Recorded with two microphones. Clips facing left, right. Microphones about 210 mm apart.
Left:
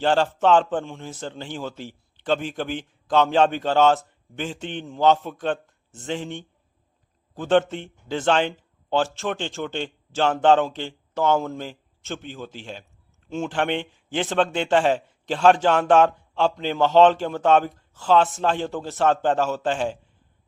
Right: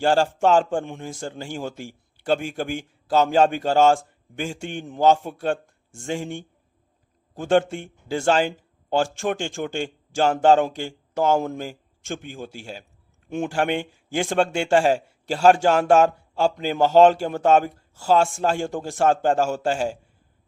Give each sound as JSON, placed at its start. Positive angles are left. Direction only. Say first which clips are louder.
{"t": 0.5, "sound": "a man's voice", "louder": "even", "side_deg": -10}
{"t": 1.5, "sound": "a man's voice", "louder": "right 2 dB", "side_deg": -45}
{"t": 2.1, "sound": "a man's voice", "louder": "right 1 dB", "side_deg": -10}
{"t": 7.4, "sound": "a man's voice", "louder": "even", "side_deg": -10}
{"t": 19.2, "sound": "a man's voice", "louder": "right 1 dB", "side_deg": -45}
{"t": 19.5, "sound": "a man's voice", "louder": "right 1 dB", "side_deg": -10}